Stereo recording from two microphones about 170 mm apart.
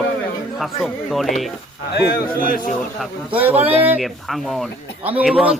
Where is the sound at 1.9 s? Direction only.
70° left (ahead or behind).